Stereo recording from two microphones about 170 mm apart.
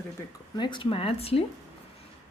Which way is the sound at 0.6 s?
30° left (ahead or behind).